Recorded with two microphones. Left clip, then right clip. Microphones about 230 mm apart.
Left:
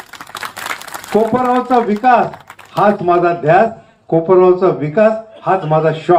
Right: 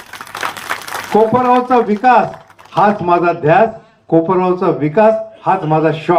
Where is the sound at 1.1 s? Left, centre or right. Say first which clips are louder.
Right 2 dB; right.